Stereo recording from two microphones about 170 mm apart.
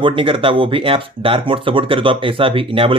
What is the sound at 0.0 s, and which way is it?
Speech, 30° right (ahead or behind).